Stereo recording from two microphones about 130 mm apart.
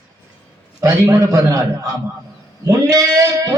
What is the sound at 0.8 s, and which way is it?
A man's voice, 25° right (ahead or behind).